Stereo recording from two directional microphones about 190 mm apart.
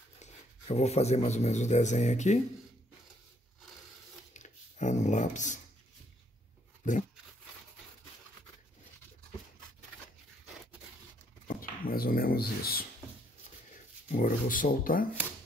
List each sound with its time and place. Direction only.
0.2 s speech: 35° left (ahead or behind)
4.3 s a sound: 40° left (ahead or behind)
11.4 s speech: 50° left (ahead or behind)
14.1 s speech: 45° left (ahead or behind)